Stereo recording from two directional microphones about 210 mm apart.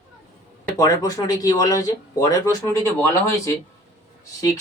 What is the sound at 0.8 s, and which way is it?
Speech, 15° left (ahead or behind).